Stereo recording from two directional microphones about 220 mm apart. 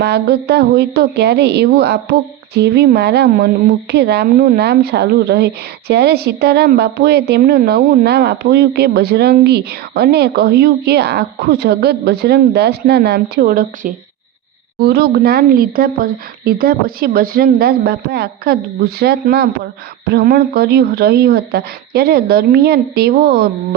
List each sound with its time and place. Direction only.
0.0 s a woman's voice: 50° right (ahead or behind)